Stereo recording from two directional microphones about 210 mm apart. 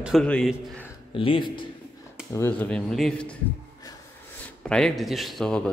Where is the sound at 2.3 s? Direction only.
10° left (ahead or behind).